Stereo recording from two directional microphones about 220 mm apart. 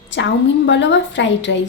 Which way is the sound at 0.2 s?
55° left (ahead or behind).